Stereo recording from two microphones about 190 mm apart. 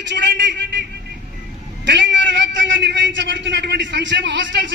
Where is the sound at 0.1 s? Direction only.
70° right (ahead or behind).